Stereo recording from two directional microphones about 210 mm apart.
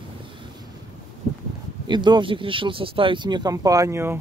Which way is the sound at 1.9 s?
20° right (ahead or behind).